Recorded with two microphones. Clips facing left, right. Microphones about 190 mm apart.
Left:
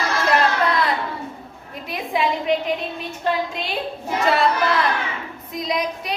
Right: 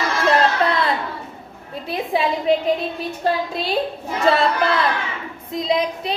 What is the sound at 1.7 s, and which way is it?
A woman's voice, 30° right (ahead or behind).